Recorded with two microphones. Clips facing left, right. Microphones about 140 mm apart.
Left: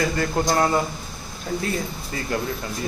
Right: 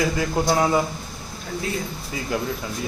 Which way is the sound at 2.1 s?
5° right (ahead or behind).